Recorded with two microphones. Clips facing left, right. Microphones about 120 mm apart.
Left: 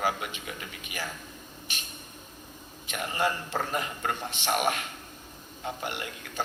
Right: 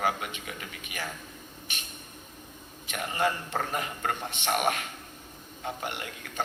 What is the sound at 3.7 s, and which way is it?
Speech, 45° right (ahead or behind).